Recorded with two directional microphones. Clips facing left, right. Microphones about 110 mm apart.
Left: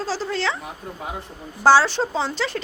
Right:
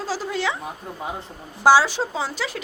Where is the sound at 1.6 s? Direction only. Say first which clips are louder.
Left 1 dB; 10° right (ahead or behind).